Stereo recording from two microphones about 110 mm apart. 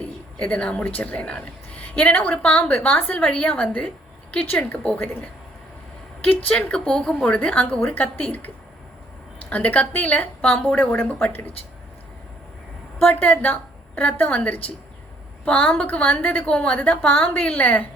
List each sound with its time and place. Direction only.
0.3 s a woman's voice: 10° left (ahead or behind)
6.2 s a woman's voice: 10° left (ahead or behind)
9.5 s a woman's voice: 15° left (ahead or behind)
13.1 s a woman's voice: 15° left (ahead or behind)